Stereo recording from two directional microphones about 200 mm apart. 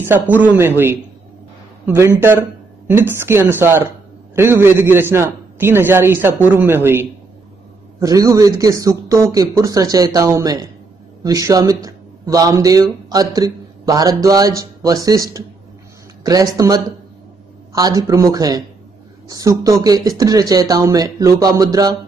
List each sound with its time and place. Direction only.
0.0 s speech: 10° right (ahead or behind)